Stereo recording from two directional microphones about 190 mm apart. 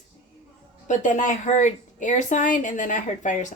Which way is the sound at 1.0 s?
40° left (ahead or behind).